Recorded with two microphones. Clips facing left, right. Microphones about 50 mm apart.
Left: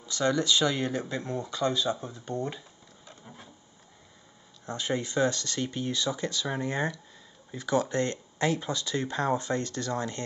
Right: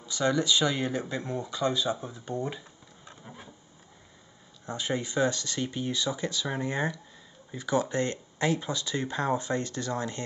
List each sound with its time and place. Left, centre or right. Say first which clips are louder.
0.0 s speech: even; centre
3.3 s a sound: right 2 dB; centre
4.6 s speech: even; centre